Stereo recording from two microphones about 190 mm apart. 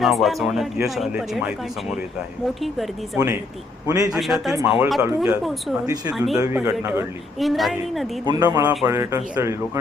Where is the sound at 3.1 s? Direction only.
15° right (ahead or behind).